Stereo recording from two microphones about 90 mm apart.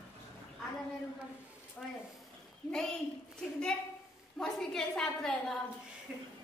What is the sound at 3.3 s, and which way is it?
A woman's voice, 10° left (ahead or behind).